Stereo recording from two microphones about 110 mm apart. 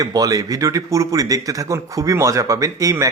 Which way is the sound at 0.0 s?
35° right (ahead or behind).